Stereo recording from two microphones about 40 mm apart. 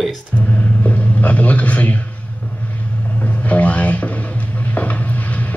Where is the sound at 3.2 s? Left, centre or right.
Left.